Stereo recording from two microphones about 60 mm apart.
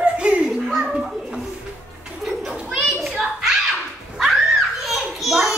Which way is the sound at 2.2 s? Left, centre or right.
Centre.